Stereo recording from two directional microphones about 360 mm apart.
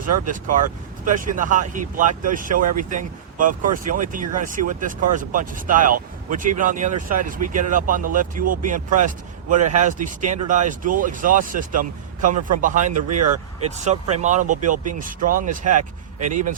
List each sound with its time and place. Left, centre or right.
0.0 s speech: right
12.9 s speech: right
13.7 s speech: centre
15.8 s speech: right
16.3 s speech: right